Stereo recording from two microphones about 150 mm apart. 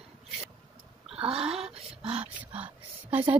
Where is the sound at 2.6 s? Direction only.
10° right (ahead or behind).